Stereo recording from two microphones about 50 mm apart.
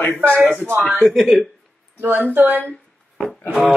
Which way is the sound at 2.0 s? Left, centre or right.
Right.